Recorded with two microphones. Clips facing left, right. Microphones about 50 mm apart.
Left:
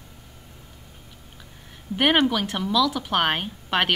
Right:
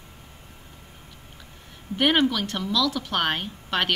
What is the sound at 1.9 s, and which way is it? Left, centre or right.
Speech, centre.